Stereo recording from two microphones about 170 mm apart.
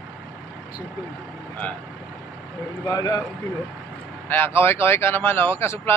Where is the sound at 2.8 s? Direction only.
25° left (ahead or behind).